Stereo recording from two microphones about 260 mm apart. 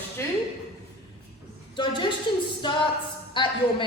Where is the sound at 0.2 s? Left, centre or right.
Centre.